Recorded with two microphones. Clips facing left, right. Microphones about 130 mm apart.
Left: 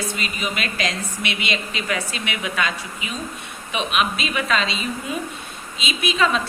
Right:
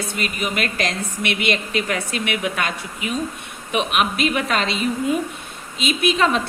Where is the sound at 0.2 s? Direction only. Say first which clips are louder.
Right 3 dB; 55° right (ahead or behind).